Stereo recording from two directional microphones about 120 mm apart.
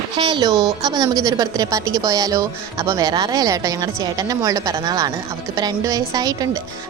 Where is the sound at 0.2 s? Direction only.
40° right (ahead or behind).